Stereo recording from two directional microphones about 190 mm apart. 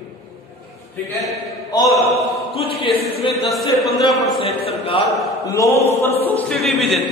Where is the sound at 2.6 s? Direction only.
30° left (ahead or behind).